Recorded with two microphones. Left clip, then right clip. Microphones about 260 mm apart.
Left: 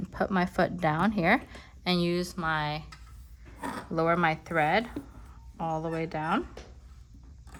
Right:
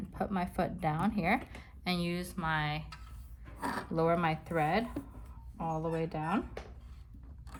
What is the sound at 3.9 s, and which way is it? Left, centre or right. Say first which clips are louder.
Speech: left 5 dB; left.